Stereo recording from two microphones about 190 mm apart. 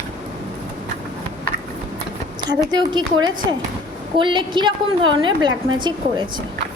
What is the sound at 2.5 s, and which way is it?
Speech, 25° right (ahead or behind).